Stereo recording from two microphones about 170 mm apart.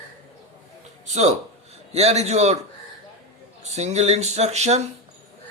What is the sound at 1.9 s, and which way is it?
Music, 40° right (ahead or behind).